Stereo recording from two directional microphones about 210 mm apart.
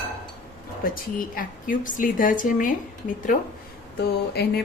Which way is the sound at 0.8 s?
40° left (ahead or behind).